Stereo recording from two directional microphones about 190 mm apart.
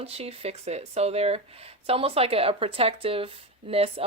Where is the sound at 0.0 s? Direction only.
30° right (ahead or behind).